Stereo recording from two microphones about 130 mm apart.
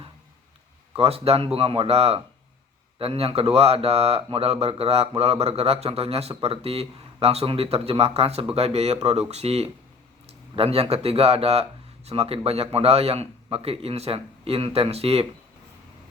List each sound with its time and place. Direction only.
0.9 s speech: 50° right (ahead or behind)